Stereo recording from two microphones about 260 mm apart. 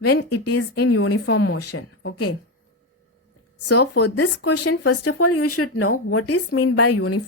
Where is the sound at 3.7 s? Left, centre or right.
Left.